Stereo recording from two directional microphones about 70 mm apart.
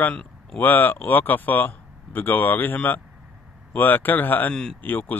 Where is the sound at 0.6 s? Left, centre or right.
Left.